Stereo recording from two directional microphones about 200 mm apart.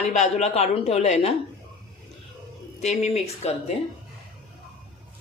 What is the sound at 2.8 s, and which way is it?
Speech, 35° left (ahead or behind).